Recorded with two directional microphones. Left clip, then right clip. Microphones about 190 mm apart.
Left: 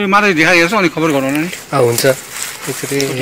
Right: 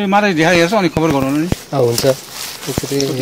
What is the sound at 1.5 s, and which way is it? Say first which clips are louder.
Speech: left 4 dB; centre (ahead or behind).